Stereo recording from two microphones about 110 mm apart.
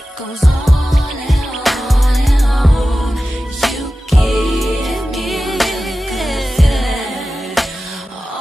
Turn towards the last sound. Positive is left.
turn(degrees=0)  # may be behind; listen again after turning